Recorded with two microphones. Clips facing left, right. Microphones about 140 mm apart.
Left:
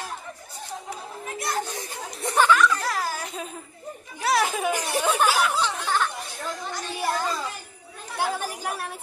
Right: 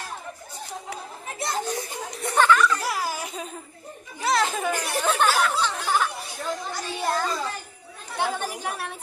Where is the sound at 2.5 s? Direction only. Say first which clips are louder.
Left 1 dB; 5° right (ahead or behind).